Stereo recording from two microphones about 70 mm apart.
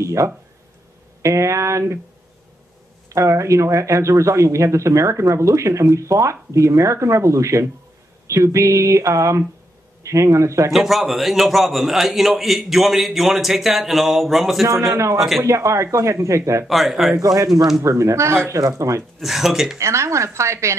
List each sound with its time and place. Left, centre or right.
0.0 s speech: right
3.1 s speech: right
10.7 s a man's voice: centre
14.9 s speech: right
15.1 s a man's voice: centre
15.4 s speech: right
16.6 s a man's voice: centre
17.2 s speech: right
17.8 s speech: right
19.1 s a man's voice: centre
19.8 s speech: right